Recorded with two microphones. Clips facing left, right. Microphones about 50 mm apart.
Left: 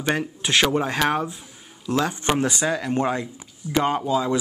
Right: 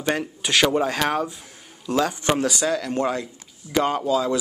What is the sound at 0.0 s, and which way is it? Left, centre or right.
Speech, centre.